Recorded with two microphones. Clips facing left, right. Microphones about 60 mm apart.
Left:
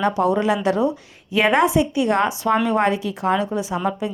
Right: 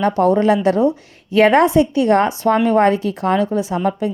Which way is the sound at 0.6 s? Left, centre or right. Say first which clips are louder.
Right 4 dB; right.